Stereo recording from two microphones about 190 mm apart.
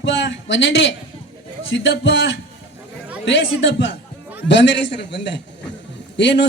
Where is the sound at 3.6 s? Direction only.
75° left (ahead or behind).